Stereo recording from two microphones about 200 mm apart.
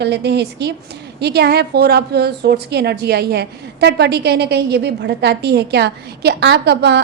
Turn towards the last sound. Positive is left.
turn(degrees=-60)  # may be behind; listen again after turning